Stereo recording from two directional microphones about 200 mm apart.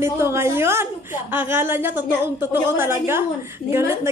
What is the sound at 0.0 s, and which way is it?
A woman's voice, 15° right (ahead or behind).